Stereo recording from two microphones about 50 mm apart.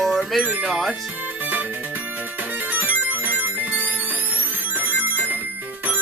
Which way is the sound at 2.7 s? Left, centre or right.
Right.